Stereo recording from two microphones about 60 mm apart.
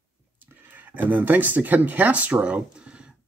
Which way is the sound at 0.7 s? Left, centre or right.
Right.